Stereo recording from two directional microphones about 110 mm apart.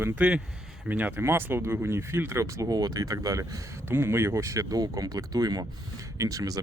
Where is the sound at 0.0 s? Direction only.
10° right (ahead or behind).